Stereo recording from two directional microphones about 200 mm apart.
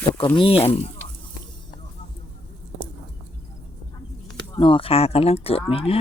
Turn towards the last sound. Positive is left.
turn(degrees=30)  # may be behind; listen again after turning